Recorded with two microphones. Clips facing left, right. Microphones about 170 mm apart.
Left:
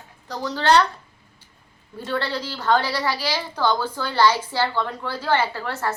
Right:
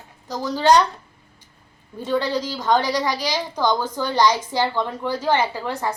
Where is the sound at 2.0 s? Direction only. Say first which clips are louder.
Right 4 dB; 10° right (ahead or behind).